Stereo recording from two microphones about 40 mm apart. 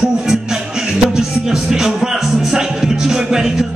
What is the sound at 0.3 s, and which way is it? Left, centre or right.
Music, centre.